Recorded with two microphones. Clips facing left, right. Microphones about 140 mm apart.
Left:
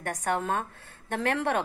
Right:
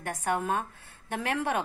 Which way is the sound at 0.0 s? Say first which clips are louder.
Left 1 dB; 15° right (ahead or behind).